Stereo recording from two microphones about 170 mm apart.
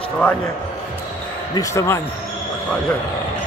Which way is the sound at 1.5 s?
20° left (ahead or behind).